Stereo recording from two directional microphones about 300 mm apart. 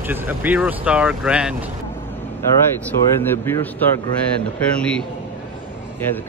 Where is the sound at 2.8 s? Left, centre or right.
Centre.